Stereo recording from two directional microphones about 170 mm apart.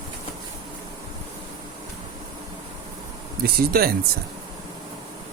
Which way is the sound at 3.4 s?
65° right (ahead or behind).